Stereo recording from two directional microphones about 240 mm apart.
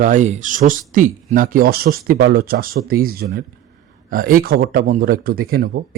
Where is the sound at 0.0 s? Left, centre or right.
Right.